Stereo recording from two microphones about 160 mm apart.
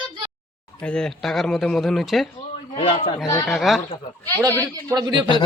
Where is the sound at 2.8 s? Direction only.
35° left (ahead or behind).